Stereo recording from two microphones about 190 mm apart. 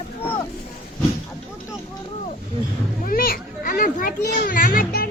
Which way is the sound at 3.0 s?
50° left (ahead or behind).